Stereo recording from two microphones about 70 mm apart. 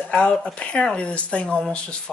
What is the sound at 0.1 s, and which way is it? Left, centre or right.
Speech, centre.